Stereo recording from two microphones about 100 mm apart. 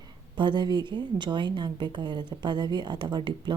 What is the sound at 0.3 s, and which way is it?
Speech, 50° right (ahead or behind).